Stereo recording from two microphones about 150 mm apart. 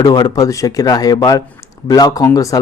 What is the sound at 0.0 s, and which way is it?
Speech, 25° left (ahead or behind).